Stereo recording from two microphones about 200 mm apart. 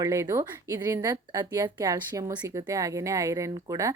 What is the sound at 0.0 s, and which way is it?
A woman's voice, 15° right (ahead or behind).